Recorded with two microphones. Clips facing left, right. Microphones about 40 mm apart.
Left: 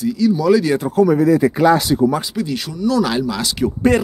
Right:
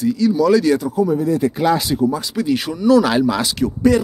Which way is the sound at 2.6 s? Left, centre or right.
Centre.